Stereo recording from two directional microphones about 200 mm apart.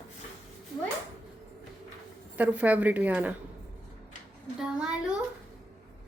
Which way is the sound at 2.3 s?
5° right (ahead or behind).